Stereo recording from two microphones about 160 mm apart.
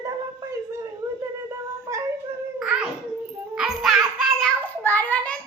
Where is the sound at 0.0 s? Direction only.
20° right (ahead or behind).